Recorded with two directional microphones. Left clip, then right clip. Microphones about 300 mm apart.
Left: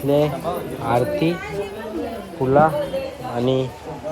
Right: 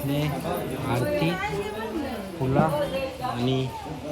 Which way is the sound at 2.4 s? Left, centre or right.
Centre.